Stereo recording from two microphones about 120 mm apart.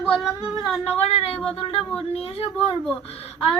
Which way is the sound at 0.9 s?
60° left (ahead or behind).